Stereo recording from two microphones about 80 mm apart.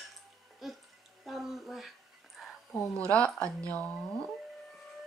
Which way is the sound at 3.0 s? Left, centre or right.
Centre.